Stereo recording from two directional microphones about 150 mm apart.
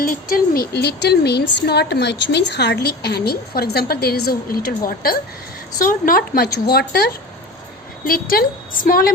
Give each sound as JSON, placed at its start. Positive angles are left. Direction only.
{"t": 0.0, "sound": "a woman's voice", "side_deg": 70}
{"t": 8.0, "sound": "a woman's voice", "side_deg": 75}